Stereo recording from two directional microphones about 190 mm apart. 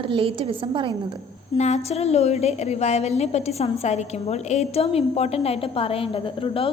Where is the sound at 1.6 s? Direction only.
35° left (ahead or behind).